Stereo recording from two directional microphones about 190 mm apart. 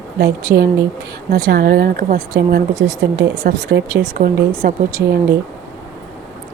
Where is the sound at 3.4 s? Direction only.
55° right (ahead or behind).